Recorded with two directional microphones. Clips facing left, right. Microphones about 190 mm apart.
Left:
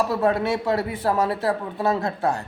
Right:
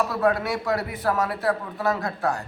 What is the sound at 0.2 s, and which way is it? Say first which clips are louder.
A man's voice: left 2 dB; 25° left (ahead or behind).